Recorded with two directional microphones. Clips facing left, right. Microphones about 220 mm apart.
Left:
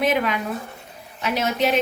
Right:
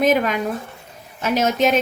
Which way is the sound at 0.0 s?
45° right (ahead or behind).